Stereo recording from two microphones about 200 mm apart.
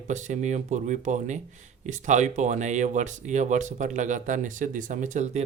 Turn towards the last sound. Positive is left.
turn(degrees=-35)  # may be behind; listen again after turning